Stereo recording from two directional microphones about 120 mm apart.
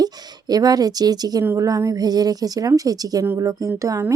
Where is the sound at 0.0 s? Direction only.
35° right (ahead or behind).